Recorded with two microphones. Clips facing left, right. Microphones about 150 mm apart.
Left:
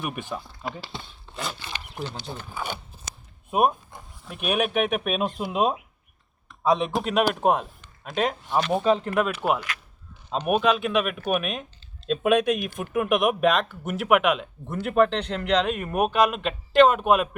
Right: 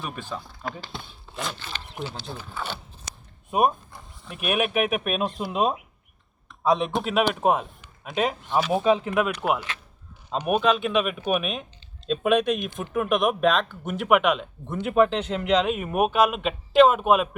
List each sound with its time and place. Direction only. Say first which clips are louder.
0.0 s speech: left 2 dB; 20° left (ahead or behind)
0.3 s speech: even; centre (ahead or behind)
4.3 s a man's voice: even; 5° right (ahead or behind)